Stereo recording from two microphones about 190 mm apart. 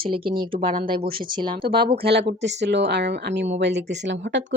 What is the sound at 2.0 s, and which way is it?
Speech, 60° right (ahead or behind).